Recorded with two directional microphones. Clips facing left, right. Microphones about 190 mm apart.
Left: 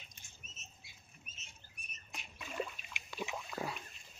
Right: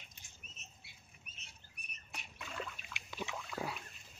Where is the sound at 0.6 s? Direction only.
60° right (ahead or behind).